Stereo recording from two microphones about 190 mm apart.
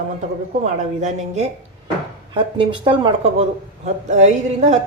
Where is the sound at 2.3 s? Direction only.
25° right (ahead or behind).